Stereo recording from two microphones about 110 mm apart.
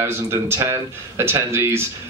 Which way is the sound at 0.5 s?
20° right (ahead or behind).